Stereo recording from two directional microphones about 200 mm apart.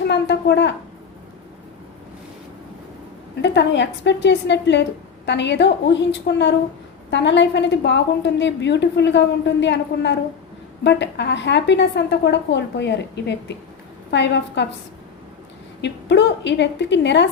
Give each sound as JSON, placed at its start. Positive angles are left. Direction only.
{"t": 0.1, "sound": "a woman's voice", "side_deg": 60}
{"t": 3.4, "sound": "a woman's voice", "side_deg": 60}
{"t": 15.8, "sound": "a woman's voice", "side_deg": 60}